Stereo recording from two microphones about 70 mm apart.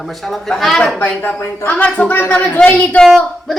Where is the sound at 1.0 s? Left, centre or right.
Left.